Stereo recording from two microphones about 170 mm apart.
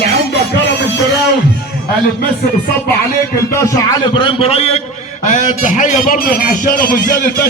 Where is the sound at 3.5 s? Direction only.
20° left (ahead or behind).